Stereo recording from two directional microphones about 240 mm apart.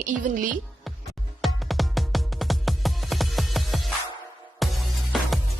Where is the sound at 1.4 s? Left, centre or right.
Centre.